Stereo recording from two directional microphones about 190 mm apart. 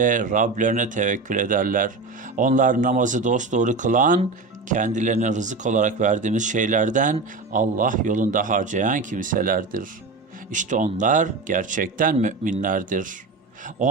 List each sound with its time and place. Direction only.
0.0 s speech: 45° right (ahead or behind)